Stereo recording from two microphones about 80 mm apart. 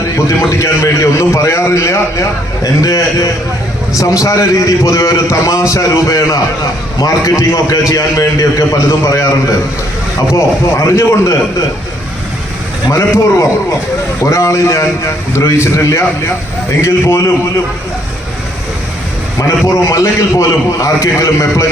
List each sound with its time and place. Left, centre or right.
0.3 s a man's voice: left
10.3 s a man's voice: left
12.9 s a man's voice: left
19.4 s a man's voice: left